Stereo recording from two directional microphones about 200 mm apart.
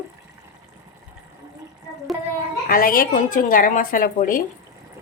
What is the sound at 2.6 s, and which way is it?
A woman's voice, 45° left (ahead or behind).